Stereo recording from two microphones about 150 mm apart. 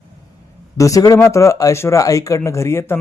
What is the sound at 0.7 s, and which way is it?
Speech, 20° left (ahead or behind).